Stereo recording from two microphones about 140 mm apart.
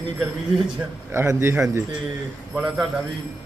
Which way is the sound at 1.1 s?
20° right (ahead or behind).